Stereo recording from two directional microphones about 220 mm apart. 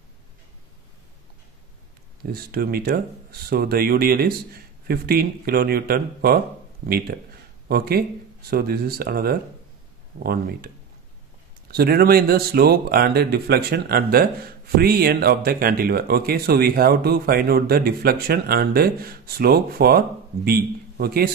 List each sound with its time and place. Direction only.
2.3 s speech: 45° right (ahead or behind)
11.7 s speech: 45° right (ahead or behind)